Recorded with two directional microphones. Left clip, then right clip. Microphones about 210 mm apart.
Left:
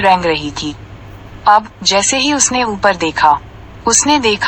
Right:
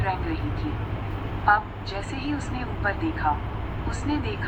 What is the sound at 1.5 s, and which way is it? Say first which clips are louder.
Speech: left 12 dB; 55° left (ahead or behind).